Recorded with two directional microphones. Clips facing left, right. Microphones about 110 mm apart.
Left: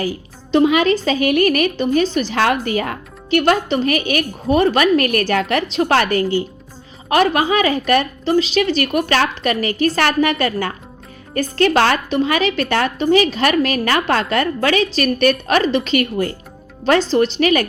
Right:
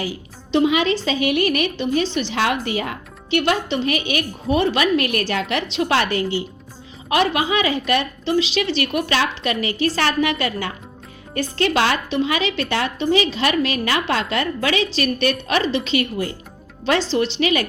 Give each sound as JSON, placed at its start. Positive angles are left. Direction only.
{"t": 0.0, "sound": "a woman's voice", "side_deg": 45}